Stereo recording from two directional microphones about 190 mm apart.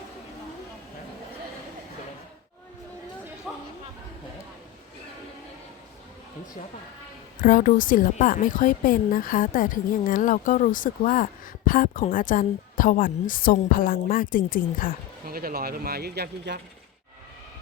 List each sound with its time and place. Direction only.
3.5 s a sound: 5° right (ahead or behind)
7.4 s a woman's voice: 45° left (ahead or behind)
15.3 s speech: 50° right (ahead or behind)